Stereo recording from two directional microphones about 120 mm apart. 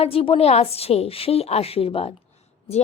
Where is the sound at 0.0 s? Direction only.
50° left (ahead or behind).